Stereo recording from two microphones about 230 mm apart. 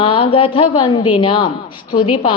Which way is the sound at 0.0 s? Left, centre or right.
Left.